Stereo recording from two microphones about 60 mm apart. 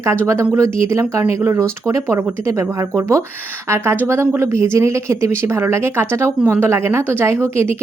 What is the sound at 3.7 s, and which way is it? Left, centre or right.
A woman's voice, right.